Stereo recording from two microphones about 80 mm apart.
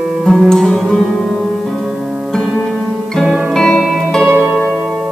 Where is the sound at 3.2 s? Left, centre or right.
Centre.